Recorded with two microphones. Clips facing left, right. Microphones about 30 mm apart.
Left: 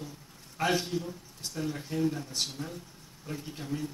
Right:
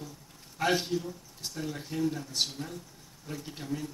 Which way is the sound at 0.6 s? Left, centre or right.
Centre.